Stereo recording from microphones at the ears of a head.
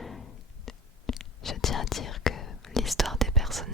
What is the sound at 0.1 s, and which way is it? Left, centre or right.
Whispering, left.